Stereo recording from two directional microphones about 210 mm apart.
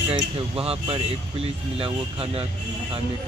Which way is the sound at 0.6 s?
25° right (ahead or behind).